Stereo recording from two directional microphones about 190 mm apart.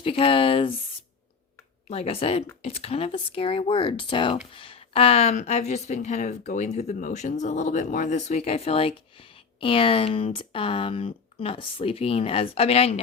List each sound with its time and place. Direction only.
0.0 s speech: 30° left (ahead or behind)
1.9 s speech: 30° left (ahead or behind)